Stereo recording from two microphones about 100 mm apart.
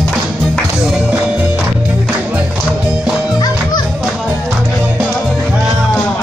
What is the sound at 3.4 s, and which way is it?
Music, 45° left (ahead or behind).